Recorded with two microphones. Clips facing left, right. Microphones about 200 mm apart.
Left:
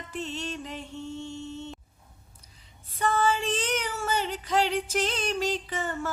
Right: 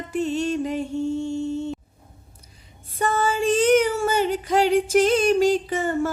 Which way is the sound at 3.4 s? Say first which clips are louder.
Right 10 dB; 10° right (ahead or behind).